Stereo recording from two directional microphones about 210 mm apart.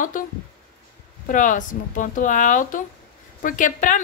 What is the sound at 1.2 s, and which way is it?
A woman's voice, 40° left (ahead or behind).